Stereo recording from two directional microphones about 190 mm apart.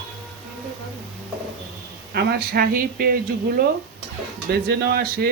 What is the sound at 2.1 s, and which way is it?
Speech, 55° right (ahead or behind).